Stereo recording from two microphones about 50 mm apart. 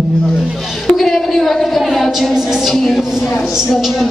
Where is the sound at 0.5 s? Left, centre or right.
Centre.